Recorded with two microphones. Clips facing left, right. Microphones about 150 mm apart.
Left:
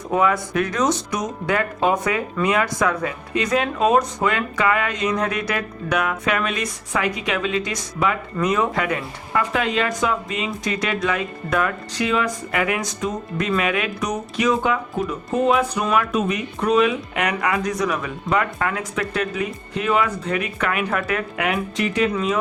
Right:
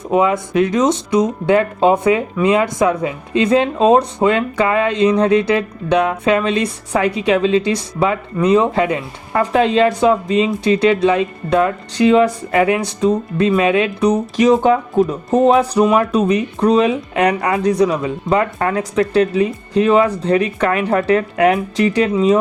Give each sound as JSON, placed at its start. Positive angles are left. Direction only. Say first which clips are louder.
{"t": 0.1, "sound": "speech", "louder": "right 5 dB", "side_deg": -20}